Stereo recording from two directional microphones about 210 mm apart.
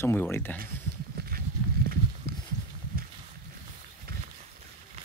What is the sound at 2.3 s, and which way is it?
Horse, 50° right (ahead or behind).